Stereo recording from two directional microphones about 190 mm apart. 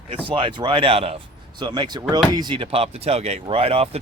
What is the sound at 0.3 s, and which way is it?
Speech, 25° right (ahead or behind).